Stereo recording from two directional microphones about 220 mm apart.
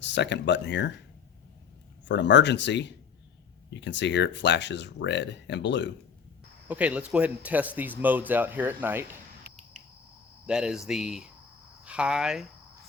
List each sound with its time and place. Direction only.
0.0 s speech: 55° left (ahead or behind)
2.0 s speech: 55° left (ahead or behind)
6.7 s speech: 5° right (ahead or behind)
9.5 s a sound: 45° right (ahead or behind)
10.4 s speech: 5° right (ahead or behind)